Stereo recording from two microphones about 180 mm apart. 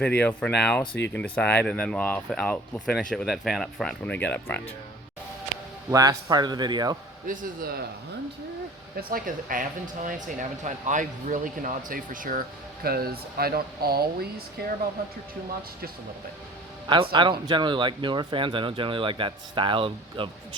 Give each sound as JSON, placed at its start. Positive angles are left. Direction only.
{"t": 0.2, "sound": "speech", "side_deg": 10}
{"t": 0.9, "sound": "speech", "side_deg": 75}
{"t": 1.2, "sound": "speech", "side_deg": 10}
{"t": 5.9, "sound": "speech", "side_deg": -20}
{"t": 7.3, "sound": "speech", "side_deg": -55}
{"t": 9.0, "sound": "speech", "side_deg": -55}
{"t": 16.9, "sound": "speech", "side_deg": -25}